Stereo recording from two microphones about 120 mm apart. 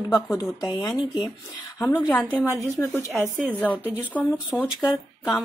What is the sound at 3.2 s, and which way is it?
A woman's voice, 15° left (ahead or behind).